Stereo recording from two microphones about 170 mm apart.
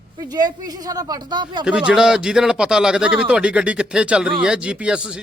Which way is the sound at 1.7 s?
5° right (ahead or behind).